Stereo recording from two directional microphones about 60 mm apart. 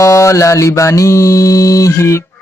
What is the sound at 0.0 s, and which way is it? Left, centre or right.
Mantra, left.